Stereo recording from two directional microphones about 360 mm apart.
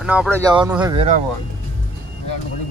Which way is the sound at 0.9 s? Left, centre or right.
Centre.